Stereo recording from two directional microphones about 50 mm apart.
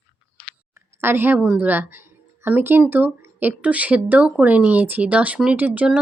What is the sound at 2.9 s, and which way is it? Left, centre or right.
Speech, right.